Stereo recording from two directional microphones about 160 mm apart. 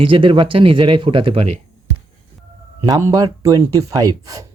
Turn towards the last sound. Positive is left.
turn(degrees=-20)  # may be behind; listen again after turning